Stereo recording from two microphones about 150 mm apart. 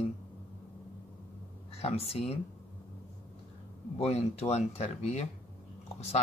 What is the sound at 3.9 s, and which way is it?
Speech, 45° left (ahead or behind).